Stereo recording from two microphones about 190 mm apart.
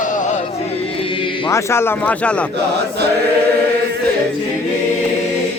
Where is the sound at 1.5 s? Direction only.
15° left (ahead or behind).